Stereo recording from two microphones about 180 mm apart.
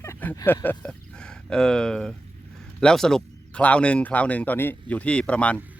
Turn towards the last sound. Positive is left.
turn(degrees=5)  # may be behind; listen again after turning